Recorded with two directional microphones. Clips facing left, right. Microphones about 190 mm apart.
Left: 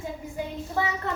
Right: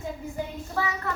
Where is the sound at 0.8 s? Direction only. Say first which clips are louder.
Left 1 dB; 15° left (ahead or behind).